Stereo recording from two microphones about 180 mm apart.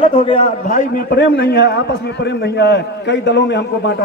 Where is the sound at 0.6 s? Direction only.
55° left (ahead or behind); by 4.0 s 70° left (ahead or behind).